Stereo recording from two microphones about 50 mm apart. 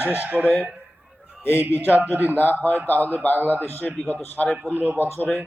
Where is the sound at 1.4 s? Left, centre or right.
Left.